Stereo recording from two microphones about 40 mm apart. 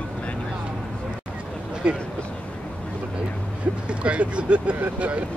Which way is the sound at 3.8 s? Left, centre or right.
Right.